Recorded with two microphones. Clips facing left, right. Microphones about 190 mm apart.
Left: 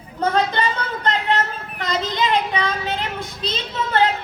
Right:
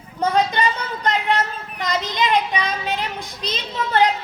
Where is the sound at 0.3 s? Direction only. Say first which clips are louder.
Right 2 dB; 15° right (ahead or behind).